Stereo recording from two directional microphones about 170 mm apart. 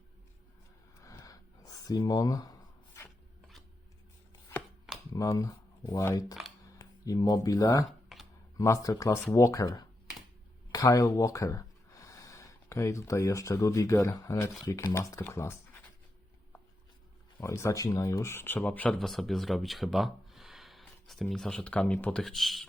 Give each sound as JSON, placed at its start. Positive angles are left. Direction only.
{"t": 1.0, "sound": "a sound", "side_deg": 20}
{"t": 5.1, "sound": "speech", "side_deg": 20}
{"t": 8.1, "sound": "computer keyboard", "side_deg": 0}
{"t": 8.5, "sound": "speech", "side_deg": 20}
{"t": 17.4, "sound": "speech", "side_deg": 15}